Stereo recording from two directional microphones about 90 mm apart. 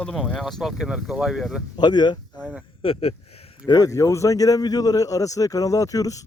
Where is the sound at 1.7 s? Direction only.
55° left (ahead or behind).